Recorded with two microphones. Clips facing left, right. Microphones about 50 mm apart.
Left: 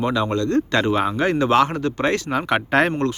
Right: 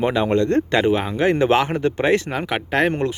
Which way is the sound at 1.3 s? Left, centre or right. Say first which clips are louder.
Even; right.